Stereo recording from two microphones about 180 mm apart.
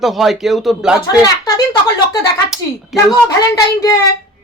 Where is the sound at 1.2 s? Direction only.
20° left (ahead or behind).